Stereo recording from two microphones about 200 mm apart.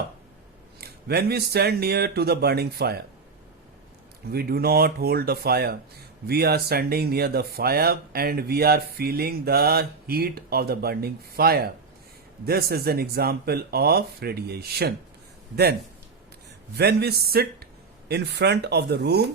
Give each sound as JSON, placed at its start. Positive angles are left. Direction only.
{"t": 0.8, "sound": "speech", "side_deg": -50}
{"t": 4.3, "sound": "speech", "side_deg": -50}
{"t": 16.7, "sound": "speech", "side_deg": -55}